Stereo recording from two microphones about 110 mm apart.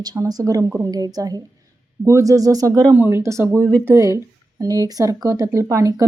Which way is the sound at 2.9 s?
20° right (ahead or behind).